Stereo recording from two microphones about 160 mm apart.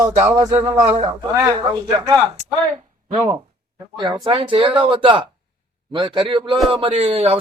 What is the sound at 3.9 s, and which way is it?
A man's voice, 25° right (ahead or behind).